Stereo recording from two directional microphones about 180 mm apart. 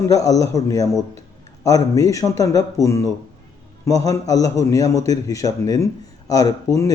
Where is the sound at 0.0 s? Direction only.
20° left (ahead or behind).